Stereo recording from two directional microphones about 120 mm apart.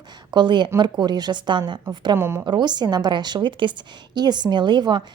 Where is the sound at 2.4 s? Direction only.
40° right (ahead or behind).